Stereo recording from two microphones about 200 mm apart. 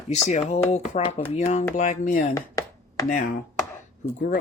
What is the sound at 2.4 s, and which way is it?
Chopping, 15° left (ahead or behind).